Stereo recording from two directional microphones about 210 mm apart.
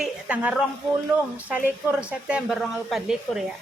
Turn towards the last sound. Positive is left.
turn(degrees=0)  # may be behind; listen again after turning